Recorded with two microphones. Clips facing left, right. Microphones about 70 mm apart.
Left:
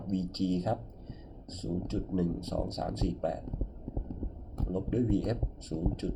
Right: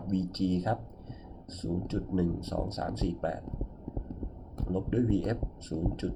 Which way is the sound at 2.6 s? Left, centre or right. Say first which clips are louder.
Even; right.